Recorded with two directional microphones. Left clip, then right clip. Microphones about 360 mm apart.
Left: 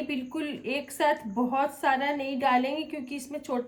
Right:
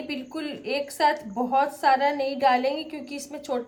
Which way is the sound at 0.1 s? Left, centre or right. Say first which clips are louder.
Even; centre.